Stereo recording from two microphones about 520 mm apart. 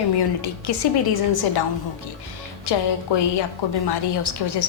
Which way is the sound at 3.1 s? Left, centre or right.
Left.